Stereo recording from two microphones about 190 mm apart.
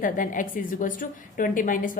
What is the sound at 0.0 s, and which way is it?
A woman's voice, 45° left (ahead or behind).